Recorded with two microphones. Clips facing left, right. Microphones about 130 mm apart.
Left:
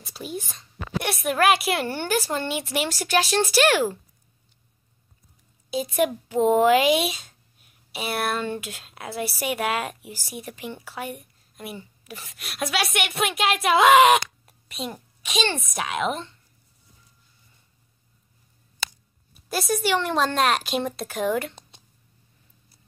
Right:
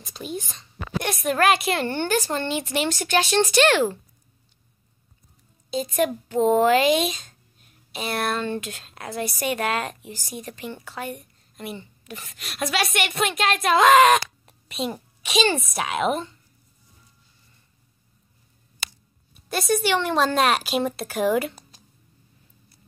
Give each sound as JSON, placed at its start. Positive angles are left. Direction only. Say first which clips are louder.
{"t": 0.0, "sound": "speech", "louder": "right 1 dB", "side_deg": 5}
{"t": 5.9, "sound": "speech", "louder": "even", "side_deg": 10}
{"t": 14.7, "sound": "speech", "louder": "right 5 dB", "side_deg": 0}
{"t": 19.3, "sound": "speech", "louder": "right 2 dB", "side_deg": 0}
{"t": 21.5, "sound": "a sound", "louder": "even", "side_deg": 25}